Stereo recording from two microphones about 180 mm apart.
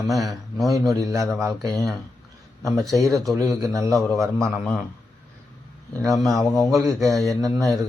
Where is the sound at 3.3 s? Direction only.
20° right (ahead or behind).